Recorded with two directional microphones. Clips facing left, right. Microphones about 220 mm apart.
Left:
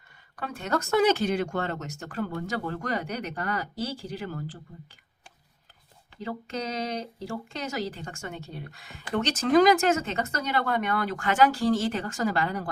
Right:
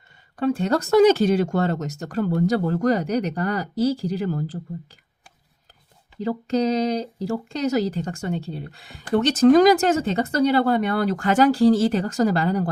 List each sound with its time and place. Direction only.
0.3 s speech: 30° right (ahead or behind)
6.1 s speech: 35° right (ahead or behind)